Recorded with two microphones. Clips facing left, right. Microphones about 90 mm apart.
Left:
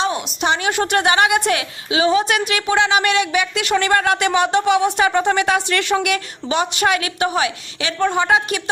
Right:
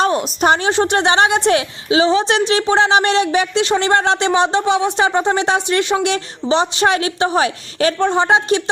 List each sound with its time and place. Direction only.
0.0 s a woman's voice: 40° right (ahead or behind)
0.7 s a woman's voice: 25° right (ahead or behind); by 7.9 s 40° right (ahead or behind)
7.9 s a woman's voice: 30° right (ahead or behind)